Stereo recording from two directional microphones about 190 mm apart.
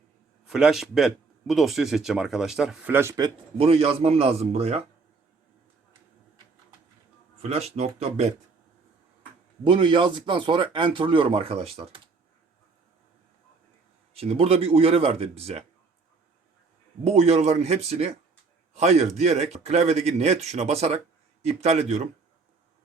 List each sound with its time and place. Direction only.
0.4 s speech: centre (ahead or behind); by 4.8 s 35° right (ahead or behind)
7.4 s a man's voice: 35° right (ahead or behind)
9.6 s speech: 25° right (ahead or behind)
14.1 s a man's voice: 30° right (ahead or behind)
17.0 s a man's voice: 35° right (ahead or behind)